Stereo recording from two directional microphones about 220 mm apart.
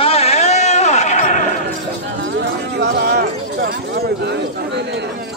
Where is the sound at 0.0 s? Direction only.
25° left (ahead or behind).